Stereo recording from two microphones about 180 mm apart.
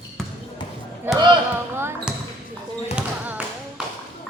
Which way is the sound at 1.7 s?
15° right (ahead or behind).